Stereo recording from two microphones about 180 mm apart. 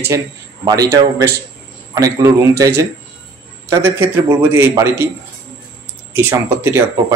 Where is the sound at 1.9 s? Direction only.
20° right (ahead or behind).